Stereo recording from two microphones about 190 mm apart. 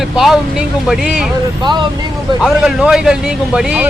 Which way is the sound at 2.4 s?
5° right (ahead or behind).